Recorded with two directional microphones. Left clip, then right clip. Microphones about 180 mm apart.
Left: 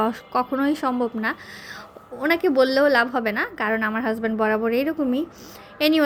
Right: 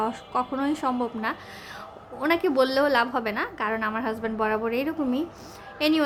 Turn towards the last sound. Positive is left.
turn(degrees=25)  # may be behind; listen again after turning